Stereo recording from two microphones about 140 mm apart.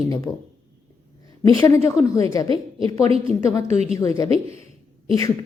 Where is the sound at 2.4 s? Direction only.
40° right (ahead or behind).